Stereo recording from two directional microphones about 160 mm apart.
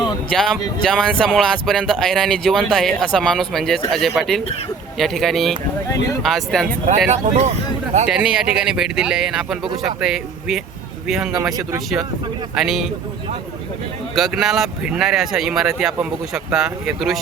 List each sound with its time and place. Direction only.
0.0 s speech: centre (ahead or behind)
6.8 s speech: 45° right (ahead or behind)
8.7 s speech: 5° right (ahead or behind)
12.5 s speech: centre (ahead or behind)
14.2 s speech: centre (ahead or behind)